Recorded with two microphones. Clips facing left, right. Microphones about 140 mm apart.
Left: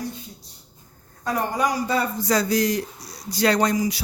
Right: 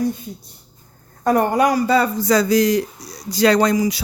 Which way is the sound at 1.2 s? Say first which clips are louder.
Right 8 dB; 55° right (ahead or behind).